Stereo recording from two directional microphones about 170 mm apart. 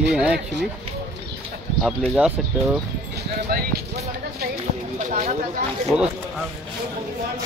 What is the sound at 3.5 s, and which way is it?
Speech, 60° right (ahead or behind).